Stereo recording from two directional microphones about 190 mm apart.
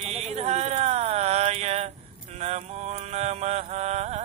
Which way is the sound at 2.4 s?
35° right (ahead or behind).